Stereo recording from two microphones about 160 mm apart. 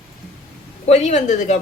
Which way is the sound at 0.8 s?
45° left (ahead or behind).